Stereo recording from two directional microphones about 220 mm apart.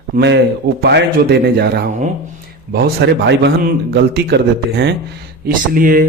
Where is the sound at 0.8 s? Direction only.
50° right (ahead or behind).